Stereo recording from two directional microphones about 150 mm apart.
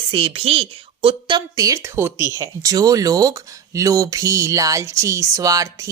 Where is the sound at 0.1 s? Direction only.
40° right (ahead or behind).